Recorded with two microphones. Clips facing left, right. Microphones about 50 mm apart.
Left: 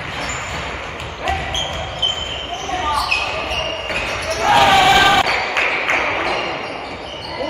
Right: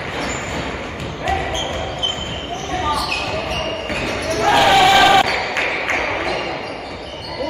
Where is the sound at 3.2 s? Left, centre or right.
Left.